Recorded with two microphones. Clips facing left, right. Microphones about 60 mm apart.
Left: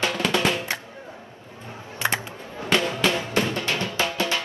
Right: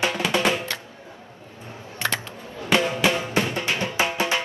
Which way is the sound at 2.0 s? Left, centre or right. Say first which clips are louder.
Left 1 dB; centre.